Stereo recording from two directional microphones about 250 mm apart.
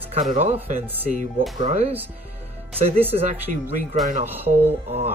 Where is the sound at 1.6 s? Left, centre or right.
Right.